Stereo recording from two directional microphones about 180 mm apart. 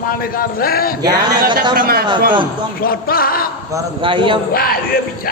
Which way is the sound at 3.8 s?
25° right (ahead or behind).